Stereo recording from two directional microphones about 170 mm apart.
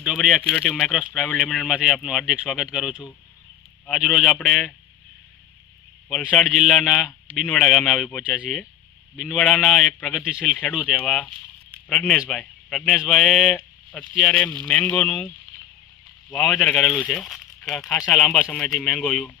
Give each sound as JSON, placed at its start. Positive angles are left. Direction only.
{"t": 0.0, "sound": "speech", "side_deg": 0}
{"t": 6.1, "sound": "speech", "side_deg": 5}
{"t": 16.3, "sound": "speech", "side_deg": 0}